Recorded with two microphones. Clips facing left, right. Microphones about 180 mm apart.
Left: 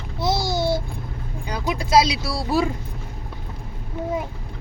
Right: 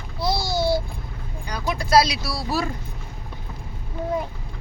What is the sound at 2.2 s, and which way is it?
Speech, 55° left (ahead or behind).